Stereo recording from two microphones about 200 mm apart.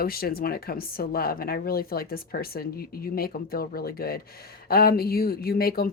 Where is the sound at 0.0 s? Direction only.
50° left (ahead or behind).